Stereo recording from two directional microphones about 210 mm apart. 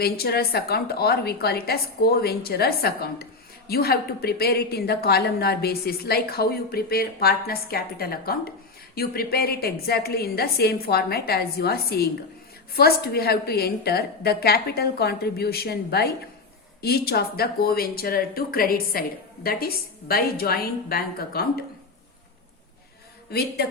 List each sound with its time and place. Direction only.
0.0 s a woman's voice: 50° left (ahead or behind)
23.3 s a woman's voice: 50° left (ahead or behind)